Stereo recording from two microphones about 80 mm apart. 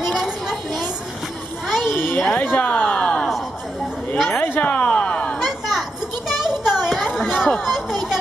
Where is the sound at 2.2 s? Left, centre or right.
Centre.